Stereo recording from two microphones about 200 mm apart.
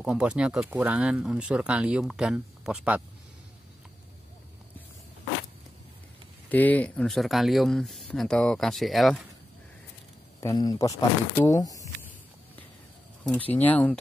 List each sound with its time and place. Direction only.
0.0 s speech: 5° right (ahead or behind)
6.5 s speech: 10° left (ahead or behind)
10.4 s speech: 20° left (ahead or behind)
13.2 s speech: 5° left (ahead or behind)